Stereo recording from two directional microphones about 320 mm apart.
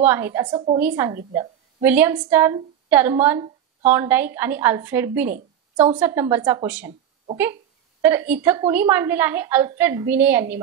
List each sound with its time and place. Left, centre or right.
0.0 s a woman's voice: centre
8.0 s a woman's voice: centre